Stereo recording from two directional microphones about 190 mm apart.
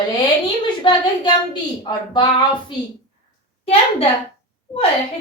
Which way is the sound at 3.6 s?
30° left (ahead or behind).